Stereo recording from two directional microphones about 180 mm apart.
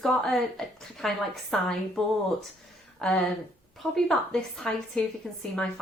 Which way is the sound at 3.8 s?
5° left (ahead or behind).